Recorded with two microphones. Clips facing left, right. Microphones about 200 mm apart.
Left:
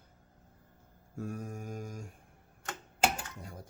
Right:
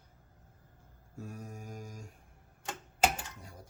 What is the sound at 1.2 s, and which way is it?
Mantra, 50° left (ahead or behind).